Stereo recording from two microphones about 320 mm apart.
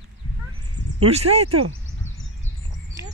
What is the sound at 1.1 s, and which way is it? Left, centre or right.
Speech, centre.